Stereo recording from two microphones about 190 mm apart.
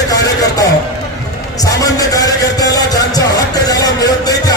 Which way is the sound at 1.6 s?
20° left (ahead or behind).